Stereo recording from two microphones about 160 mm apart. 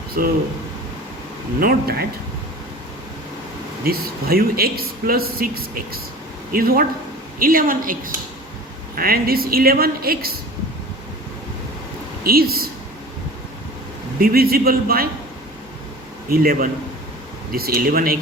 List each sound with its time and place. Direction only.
1.5 s a man's voice: 70° right (ahead or behind)
3.8 s a man's voice: 70° right (ahead or behind)
12.2 s a man's voice: 70° right (ahead or behind)
14.2 s a man's voice: 70° right (ahead or behind)
16.3 s a woman's voice: 65° right (ahead or behind)